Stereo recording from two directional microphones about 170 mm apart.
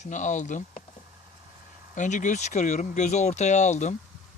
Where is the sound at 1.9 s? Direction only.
45° left (ahead or behind).